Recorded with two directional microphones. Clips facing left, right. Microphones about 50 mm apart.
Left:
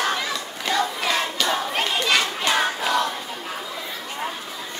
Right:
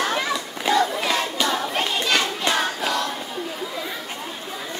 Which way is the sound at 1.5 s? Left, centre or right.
Centre.